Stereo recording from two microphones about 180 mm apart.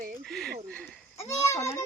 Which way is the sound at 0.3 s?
5° left (ahead or behind).